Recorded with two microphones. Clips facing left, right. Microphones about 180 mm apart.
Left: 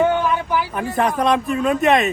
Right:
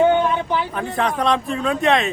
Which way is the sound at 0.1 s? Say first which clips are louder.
Right 1 dB; 25° right (ahead or behind).